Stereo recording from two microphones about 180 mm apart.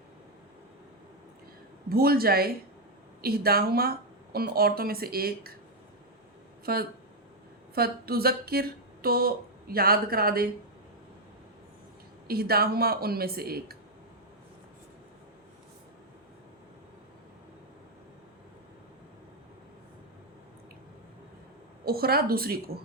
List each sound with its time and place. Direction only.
1.9 s speech: 55° right (ahead or behind)
6.7 s speech: 60° right (ahead or behind)
12.3 s speech: 60° right (ahead or behind)
21.8 s speech: 60° right (ahead or behind)